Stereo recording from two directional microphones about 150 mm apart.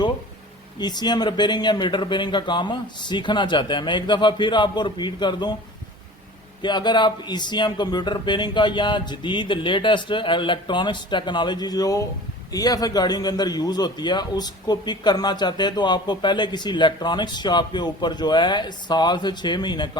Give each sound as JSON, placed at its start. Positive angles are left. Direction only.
{"t": 0.8, "sound": "speech", "side_deg": 30}
{"t": 6.6, "sound": "a man's voice", "side_deg": 30}